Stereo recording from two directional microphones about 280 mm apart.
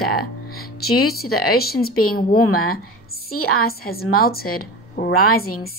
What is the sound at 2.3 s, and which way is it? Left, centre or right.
Speech, left.